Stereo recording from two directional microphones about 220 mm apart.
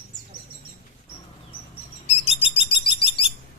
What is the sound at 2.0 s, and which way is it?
Bird, 25° left (ahead or behind).